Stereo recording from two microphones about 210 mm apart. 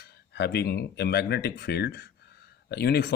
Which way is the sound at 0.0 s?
50° left (ahead or behind).